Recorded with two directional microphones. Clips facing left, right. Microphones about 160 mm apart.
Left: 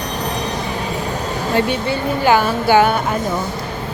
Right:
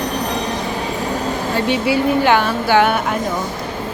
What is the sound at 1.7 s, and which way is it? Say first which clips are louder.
Speech: right 4 dB; centre (ahead or behind).